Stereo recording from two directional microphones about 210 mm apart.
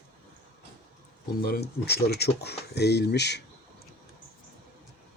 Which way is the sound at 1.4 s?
50° left (ahead or behind).